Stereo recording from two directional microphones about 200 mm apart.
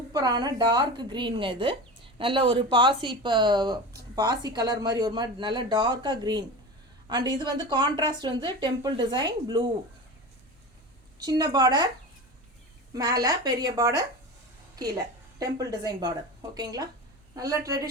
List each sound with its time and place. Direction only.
0.1 s speech: 20° right (ahead or behind)
11.2 s speech: 20° right (ahead or behind)
12.9 s a woman's voice: 20° right (ahead or behind)